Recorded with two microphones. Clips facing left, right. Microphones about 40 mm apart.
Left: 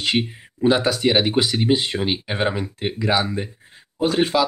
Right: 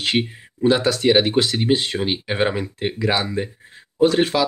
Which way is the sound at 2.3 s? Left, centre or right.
Centre.